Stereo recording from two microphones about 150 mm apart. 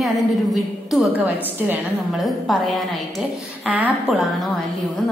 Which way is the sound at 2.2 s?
Centre (ahead or behind).